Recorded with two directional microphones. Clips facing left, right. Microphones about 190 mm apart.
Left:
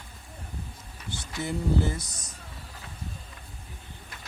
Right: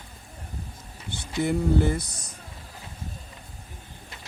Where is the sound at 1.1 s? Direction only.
60° right (ahead or behind).